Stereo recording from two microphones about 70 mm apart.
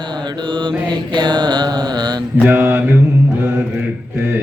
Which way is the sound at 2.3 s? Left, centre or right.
Right.